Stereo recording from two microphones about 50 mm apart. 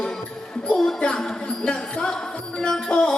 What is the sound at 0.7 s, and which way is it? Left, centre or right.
Music, centre.